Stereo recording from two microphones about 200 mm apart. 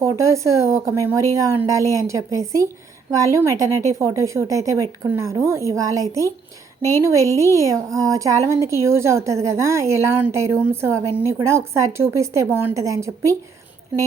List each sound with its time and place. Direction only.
0.0 s a woman's voice: 15° right (ahead or behind)